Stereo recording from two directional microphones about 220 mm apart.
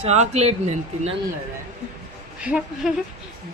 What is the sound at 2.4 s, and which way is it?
Speech, 5° right (ahead or behind).